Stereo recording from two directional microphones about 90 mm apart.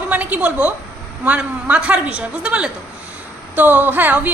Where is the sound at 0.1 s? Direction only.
15° right (ahead or behind).